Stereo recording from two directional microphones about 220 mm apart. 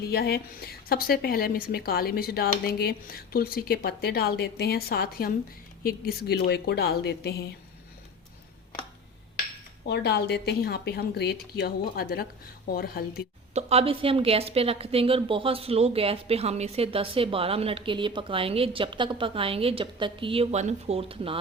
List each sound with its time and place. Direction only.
0.1 s a woman's voice: 45° left (ahead or behind)
9.8 s a woman's voice: 50° left (ahead or behind)
13.5 s a woman's voice: 30° right (ahead or behind)